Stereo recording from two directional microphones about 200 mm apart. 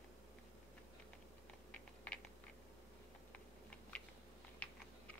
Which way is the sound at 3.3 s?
5° left (ahead or behind).